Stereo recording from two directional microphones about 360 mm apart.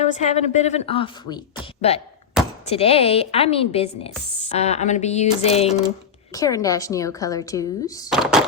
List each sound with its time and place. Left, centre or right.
0.0 s a woman's voice: centre
8.1 s speech: centre